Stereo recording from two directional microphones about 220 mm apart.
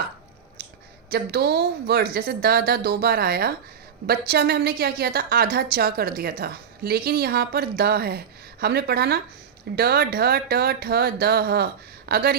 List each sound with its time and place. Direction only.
1.1 s speech: 45° right (ahead or behind)